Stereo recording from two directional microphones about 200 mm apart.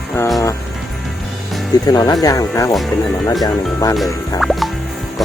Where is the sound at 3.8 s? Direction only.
15° left (ahead or behind).